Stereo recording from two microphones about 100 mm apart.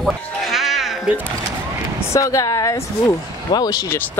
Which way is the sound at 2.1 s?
30° left (ahead or behind).